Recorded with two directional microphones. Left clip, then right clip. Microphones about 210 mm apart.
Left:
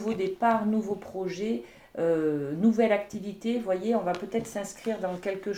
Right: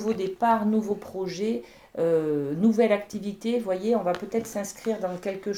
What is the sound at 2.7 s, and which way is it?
Speech, 35° right (ahead or behind).